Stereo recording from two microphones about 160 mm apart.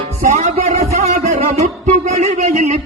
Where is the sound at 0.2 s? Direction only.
45° right (ahead or behind).